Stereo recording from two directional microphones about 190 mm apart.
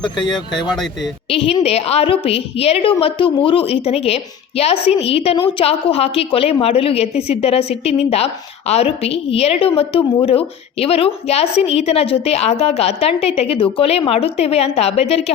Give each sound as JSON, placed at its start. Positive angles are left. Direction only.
{"t": 0.2, "sound": "a woman's voice", "side_deg": 25}